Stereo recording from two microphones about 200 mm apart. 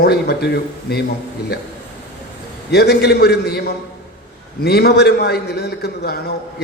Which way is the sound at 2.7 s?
55° left (ahead or behind).